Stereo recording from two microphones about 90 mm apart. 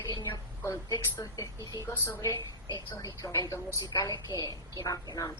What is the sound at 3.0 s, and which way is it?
A woman's voice, 40° left (ahead or behind).